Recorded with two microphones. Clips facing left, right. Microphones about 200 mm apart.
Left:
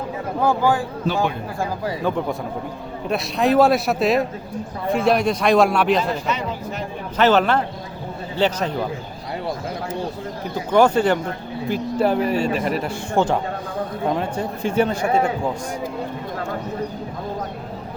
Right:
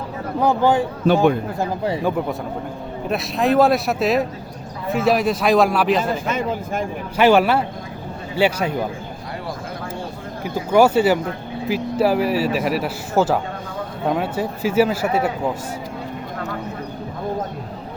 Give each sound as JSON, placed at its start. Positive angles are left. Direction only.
{"t": 0.4, "sound": "a man's voice", "side_deg": -20}
{"t": 2.0, "sound": "a man's voice", "side_deg": -10}
{"t": 6.0, "sound": "speech", "side_deg": -50}
{"t": 7.2, "sound": "speech", "side_deg": -10}
{"t": 10.4, "sound": "a man's voice", "side_deg": -10}